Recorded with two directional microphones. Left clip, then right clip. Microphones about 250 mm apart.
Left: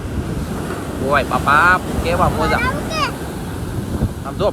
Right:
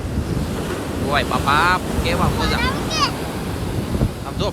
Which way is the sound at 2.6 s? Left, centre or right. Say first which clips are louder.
Left 1 dB; left.